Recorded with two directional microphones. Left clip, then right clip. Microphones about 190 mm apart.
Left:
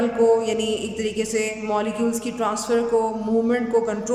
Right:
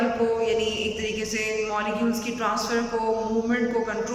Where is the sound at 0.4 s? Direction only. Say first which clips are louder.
Even; 30° left (ahead or behind).